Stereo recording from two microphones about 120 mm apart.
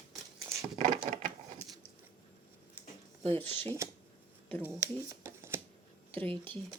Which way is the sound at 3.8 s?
25° right (ahead or behind).